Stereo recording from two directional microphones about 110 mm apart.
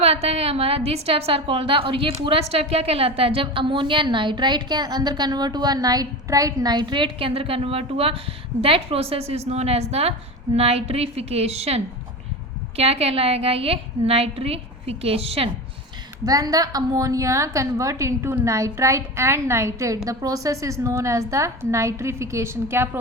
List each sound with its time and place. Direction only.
0.0 s a woman's voice: 70° right (ahead or behind)
16.2 s a woman's voice: 35° right (ahead or behind)